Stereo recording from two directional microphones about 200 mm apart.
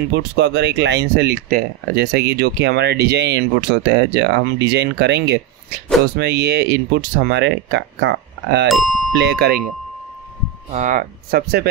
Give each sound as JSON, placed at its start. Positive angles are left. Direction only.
{"t": 0.1, "sound": "speech", "side_deg": -60}
{"t": 8.6, "sound": "speech", "side_deg": 0}
{"t": 9.2, "sound": "speech", "side_deg": -55}
{"t": 10.7, "sound": "speech", "side_deg": -40}